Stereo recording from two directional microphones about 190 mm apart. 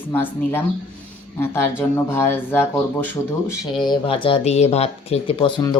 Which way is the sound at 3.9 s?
25° left (ahead or behind).